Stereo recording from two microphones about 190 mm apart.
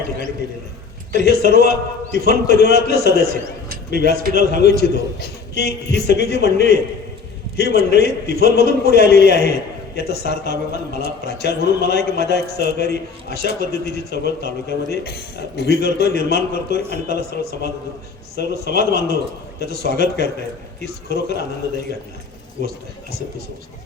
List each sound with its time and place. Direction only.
1.1 s a man's voice: 60° left (ahead or behind)